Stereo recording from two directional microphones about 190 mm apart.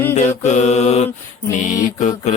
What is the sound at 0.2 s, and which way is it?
Mantra, 35° left (ahead or behind).